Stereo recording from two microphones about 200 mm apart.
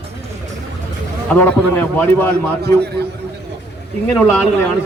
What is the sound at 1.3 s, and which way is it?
A man's voice, 10° left (ahead or behind).